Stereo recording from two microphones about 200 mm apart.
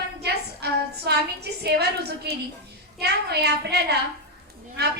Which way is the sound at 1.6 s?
55° right (ahead or behind).